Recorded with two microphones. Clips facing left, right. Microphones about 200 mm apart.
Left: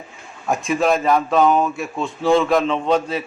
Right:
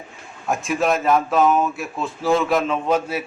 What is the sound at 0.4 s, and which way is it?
A man's voice, centre (ahead or behind).